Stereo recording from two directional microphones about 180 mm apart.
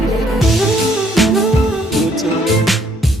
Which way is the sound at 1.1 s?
Centre (ahead or behind).